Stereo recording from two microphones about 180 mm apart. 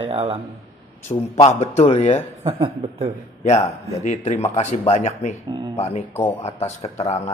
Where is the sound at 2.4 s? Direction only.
30° right (ahead or behind).